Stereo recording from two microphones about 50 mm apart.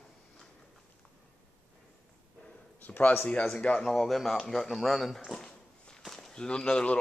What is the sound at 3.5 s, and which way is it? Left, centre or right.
Speech, left.